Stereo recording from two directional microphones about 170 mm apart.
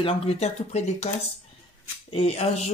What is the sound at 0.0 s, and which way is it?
Speech, 40° left (ahead or behind).